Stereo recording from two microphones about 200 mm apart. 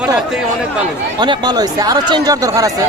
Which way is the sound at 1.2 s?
20° right (ahead or behind).